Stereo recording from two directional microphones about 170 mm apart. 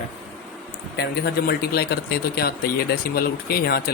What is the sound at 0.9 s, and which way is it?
Speech, 70° left (ahead or behind).